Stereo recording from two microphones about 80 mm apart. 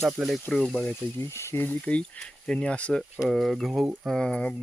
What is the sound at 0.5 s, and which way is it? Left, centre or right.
Speech, centre.